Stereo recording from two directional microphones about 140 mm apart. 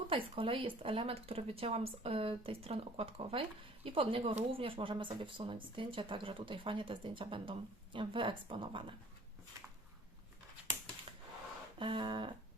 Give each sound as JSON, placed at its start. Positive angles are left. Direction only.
{"t": 0.1, "sound": "speech", "side_deg": -40}
{"t": 11.8, "sound": "speech", "side_deg": -35}